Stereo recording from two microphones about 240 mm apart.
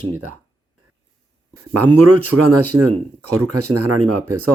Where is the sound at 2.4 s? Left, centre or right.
Right.